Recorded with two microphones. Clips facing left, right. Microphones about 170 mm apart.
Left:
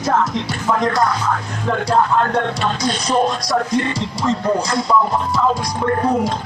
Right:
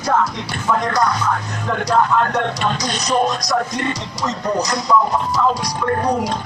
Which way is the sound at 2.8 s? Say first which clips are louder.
Left 2 dB; 25° left (ahead or behind).